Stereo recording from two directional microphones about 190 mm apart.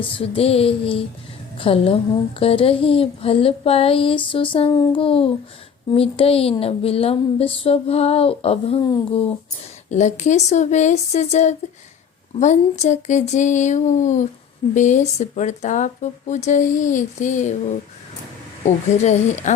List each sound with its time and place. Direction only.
0.0 s a woman's voice: 30° left (ahead or behind)
9.9 s speech: 35° left (ahead or behind)